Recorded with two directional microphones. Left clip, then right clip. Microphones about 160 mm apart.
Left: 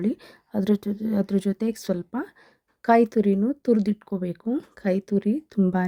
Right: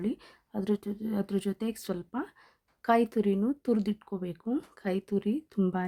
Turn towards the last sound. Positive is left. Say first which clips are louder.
# left 6 dB
turn(degrees=30)  # may be behind; listen again after turning